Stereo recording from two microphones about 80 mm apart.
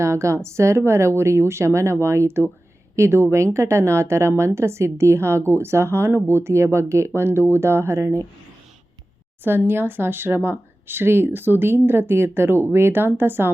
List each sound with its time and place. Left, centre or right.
0.0 s speech: right
9.4 s speech: right